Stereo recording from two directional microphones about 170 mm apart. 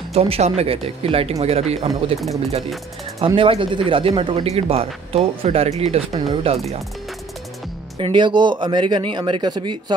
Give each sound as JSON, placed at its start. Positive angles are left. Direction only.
{"t": 0.1, "sound": "speech", "side_deg": -35}
{"t": 3.3, "sound": "speech", "side_deg": -30}
{"t": 8.0, "sound": "speech", "side_deg": -30}